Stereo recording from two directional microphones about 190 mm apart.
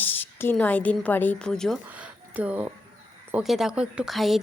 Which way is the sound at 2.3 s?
10° right (ahead or behind).